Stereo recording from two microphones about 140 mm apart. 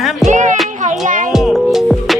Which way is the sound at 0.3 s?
60° right (ahead or behind).